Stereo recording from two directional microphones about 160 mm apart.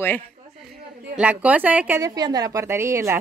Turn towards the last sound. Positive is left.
turn(degrees=-15)  # may be behind; listen again after turning